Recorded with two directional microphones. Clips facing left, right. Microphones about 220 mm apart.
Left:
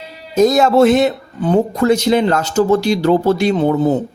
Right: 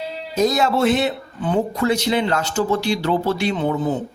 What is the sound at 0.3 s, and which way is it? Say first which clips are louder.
Speech: left 7 dB; 45° left (ahead or behind).